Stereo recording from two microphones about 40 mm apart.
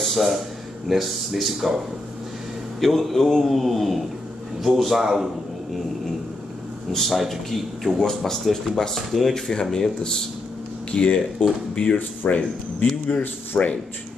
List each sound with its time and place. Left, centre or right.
0.0 s a sound: centre
0.8 s speech: centre
2.8 s speech: centre
6.9 s speech: centre
9.3 s speech: centre
10.9 s speech: left
12.2 s a man's voice: left
13.0 s a man's voice: left